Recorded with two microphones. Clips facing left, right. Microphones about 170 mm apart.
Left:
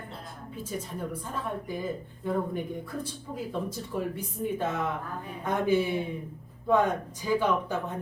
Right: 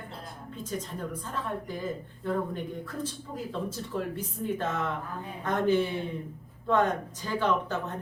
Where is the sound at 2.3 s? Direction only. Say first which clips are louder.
Left 1 dB; 10° left (ahead or behind).